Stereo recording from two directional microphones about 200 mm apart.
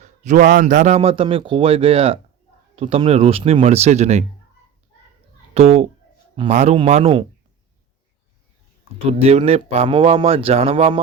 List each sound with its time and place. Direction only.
0.0 s a man's voice: 35° right (ahead or behind)
5.5 s a man's voice: 30° right (ahead or behind)
9.0 s speech: 30° right (ahead or behind)